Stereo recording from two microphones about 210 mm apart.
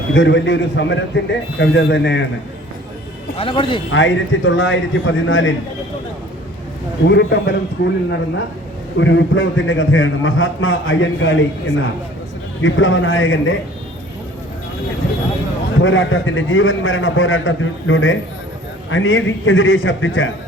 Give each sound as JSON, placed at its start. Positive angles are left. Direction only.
{"t": 0.2, "sound": "a man's voice", "side_deg": 60}
{"t": 3.3, "sound": "speech", "side_deg": 25}
{"t": 3.9, "sound": "a man's voice", "side_deg": 65}
{"t": 7.1, "sound": "a man's voice", "side_deg": 55}
{"t": 7.8, "sound": "a man's voice", "side_deg": 65}
{"t": 9.0, "sound": "a man's voice", "side_deg": 60}
{"t": 12.6, "sound": "a man's voice", "side_deg": 65}
{"t": 15.8, "sound": "a man's voice", "side_deg": 65}